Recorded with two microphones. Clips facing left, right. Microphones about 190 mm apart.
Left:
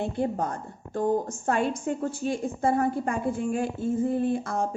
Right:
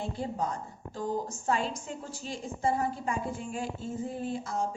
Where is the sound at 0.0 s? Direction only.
55° left (ahead or behind).